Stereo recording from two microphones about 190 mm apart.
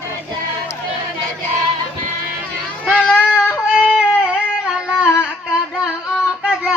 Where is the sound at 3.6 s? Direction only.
5° right (ahead or behind).